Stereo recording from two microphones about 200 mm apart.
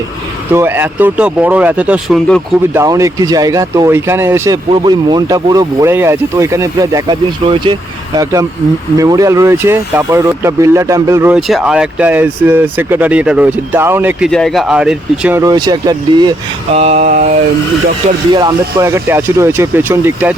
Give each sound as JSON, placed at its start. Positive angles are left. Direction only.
{"t": 0.5, "sound": "speech", "side_deg": -10}
{"t": 2.7, "sound": "speech", "side_deg": -15}
{"t": 11.4, "sound": "speech", "side_deg": 0}
{"t": 14.3, "sound": "speech", "side_deg": 0}
{"t": 15.4, "sound": "speech", "side_deg": -20}
{"t": 16.7, "sound": "mantra", "side_deg": -30}
{"t": 18.3, "sound": "speech", "side_deg": -20}